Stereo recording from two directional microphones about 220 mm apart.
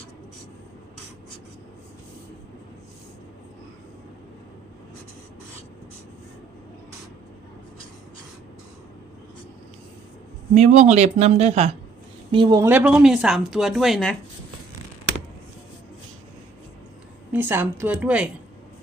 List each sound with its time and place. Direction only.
10.5 s speech: 35° right (ahead or behind); by 14.2 s centre (ahead or behind)
17.3 s a woman's voice: 10° right (ahead or behind)